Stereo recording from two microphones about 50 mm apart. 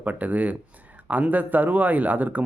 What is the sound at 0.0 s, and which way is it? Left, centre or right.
Speech, right.